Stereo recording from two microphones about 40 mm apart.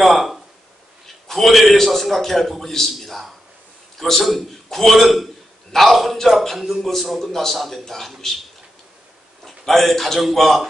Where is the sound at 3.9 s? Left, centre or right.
Centre.